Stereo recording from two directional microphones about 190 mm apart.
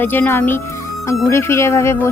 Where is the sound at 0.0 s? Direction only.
10° left (ahead or behind).